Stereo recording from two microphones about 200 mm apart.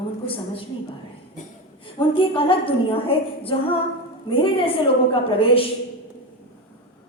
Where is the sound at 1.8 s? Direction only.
25° left (ahead or behind).